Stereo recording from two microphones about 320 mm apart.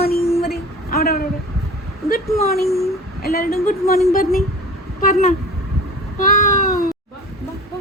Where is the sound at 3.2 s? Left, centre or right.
Left.